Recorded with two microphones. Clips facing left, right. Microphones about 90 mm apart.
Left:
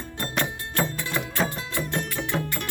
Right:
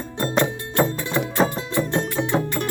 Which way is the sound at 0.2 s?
25° right (ahead or behind).